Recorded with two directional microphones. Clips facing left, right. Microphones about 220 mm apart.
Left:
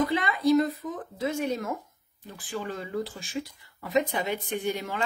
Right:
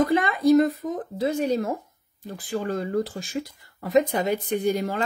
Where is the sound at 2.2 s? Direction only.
40° right (ahead or behind).